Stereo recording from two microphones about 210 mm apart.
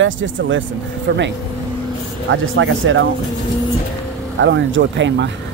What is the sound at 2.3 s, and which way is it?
Speech, 65° right (ahead or behind).